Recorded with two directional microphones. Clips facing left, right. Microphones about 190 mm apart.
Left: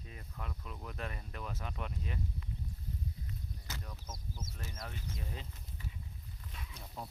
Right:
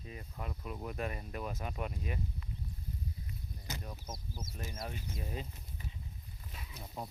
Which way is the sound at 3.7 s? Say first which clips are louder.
Right 6 dB; 20° right (ahead or behind).